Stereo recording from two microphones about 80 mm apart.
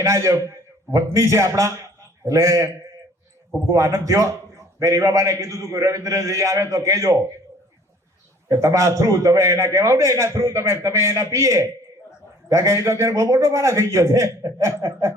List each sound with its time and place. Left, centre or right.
0.0 s a man's voice: right
3.7 s a man's voice: right
8.4 s a man's voice: right